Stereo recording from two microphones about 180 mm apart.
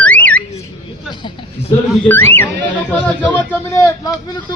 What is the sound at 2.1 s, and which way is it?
Speech, 10° left (ahead or behind).